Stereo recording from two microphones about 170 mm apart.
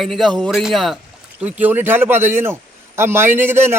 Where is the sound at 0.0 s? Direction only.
Centre (ahead or behind).